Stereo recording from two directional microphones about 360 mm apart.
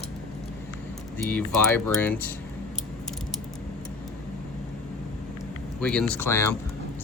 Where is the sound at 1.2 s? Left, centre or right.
Centre.